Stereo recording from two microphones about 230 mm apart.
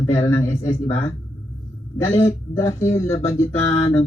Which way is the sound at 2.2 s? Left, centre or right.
Centre.